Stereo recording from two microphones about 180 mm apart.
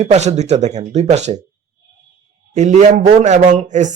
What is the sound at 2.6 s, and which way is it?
A man's voice, 40° right (ahead or behind).